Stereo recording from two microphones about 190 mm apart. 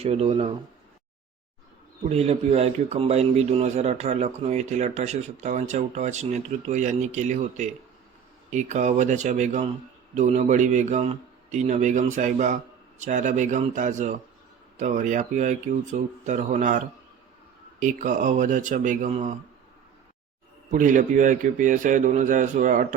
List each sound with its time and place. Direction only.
0.0 s speech: 35° right (ahead or behind)
2.0 s speech: 35° right (ahead or behind)
20.7 s a man's voice: 45° right (ahead or behind)